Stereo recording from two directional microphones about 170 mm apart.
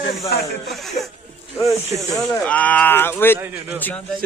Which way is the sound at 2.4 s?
10° left (ahead or behind).